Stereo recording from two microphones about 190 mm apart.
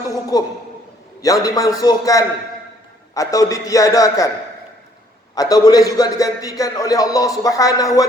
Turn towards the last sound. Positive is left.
turn(degrees=20)  # may be behind; listen again after turning